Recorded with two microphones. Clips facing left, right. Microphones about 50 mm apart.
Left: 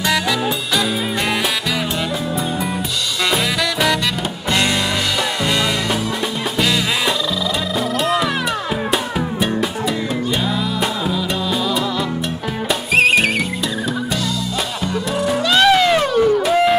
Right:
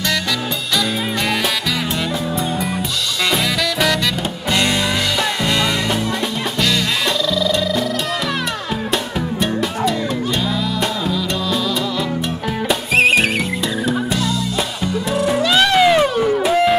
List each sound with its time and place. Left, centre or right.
12.6 s music: centre
15.1 s music: centre